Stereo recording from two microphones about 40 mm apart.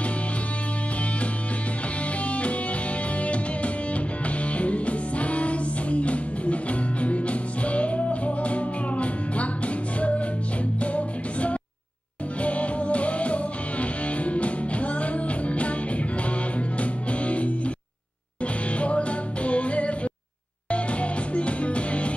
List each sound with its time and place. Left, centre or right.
2.2 s music: left